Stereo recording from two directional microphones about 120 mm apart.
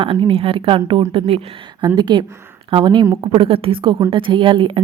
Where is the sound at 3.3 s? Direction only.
50° right (ahead or behind).